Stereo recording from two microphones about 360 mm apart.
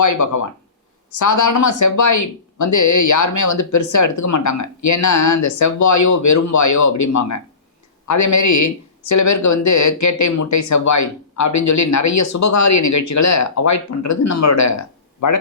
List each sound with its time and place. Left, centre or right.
0.0 s speech: left